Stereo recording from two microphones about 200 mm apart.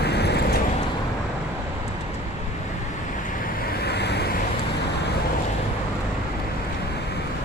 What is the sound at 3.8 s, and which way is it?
Vehicle, 55° left (ahead or behind).